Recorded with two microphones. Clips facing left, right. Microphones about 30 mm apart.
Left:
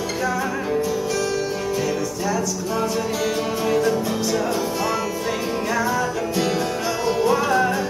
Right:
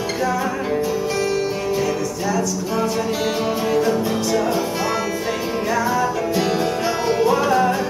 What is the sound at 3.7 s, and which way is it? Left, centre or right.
Music, centre.